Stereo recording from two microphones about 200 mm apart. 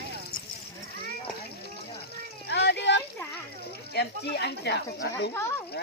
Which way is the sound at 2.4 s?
55° left (ahead or behind).